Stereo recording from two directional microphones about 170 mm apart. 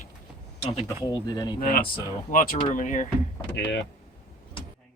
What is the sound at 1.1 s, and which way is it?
Speech, 20° left (ahead or behind).